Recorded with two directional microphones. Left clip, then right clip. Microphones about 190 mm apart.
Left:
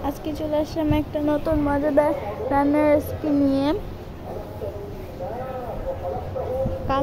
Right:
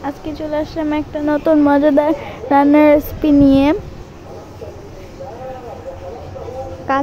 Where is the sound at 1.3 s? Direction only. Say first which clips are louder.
Right 12 dB; 35° right (ahead or behind).